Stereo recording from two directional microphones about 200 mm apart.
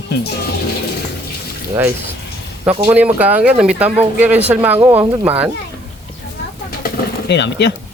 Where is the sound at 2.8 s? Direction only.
5° right (ahead or behind).